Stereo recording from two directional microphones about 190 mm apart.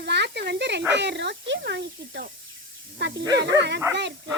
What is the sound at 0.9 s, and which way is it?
Speech, 65° right (ahead or behind).